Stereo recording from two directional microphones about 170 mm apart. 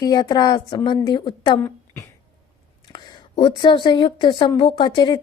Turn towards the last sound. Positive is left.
turn(degrees=25)  # may be behind; listen again after turning